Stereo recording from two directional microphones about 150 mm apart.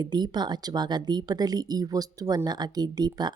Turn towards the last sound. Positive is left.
turn(degrees=-25)  # may be behind; listen again after turning